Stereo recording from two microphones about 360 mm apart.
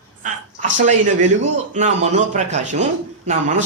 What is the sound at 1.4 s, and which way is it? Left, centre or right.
A man's voice, centre.